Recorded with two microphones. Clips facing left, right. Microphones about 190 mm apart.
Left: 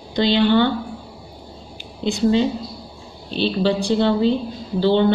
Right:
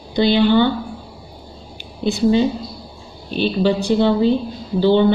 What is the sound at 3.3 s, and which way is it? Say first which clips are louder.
A woman's voice: right 2 dB; 10° right (ahead or behind).